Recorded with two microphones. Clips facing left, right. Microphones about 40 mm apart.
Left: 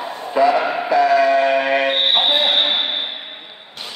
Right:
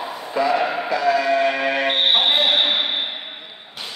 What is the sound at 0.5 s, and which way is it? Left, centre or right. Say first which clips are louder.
Music: left 2 dB; centre.